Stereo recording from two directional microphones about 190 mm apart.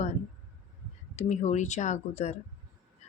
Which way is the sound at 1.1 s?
40° left (ahead or behind).